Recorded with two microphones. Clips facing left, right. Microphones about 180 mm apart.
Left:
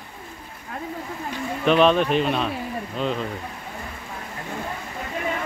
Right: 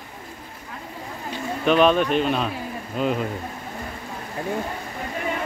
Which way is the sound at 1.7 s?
Centre (ahead or behind).